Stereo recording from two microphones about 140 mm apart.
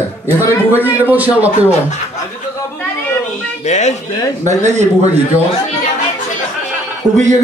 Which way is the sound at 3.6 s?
55° left (ahead or behind).